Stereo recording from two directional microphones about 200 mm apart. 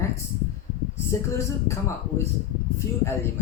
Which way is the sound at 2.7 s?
15° left (ahead or behind).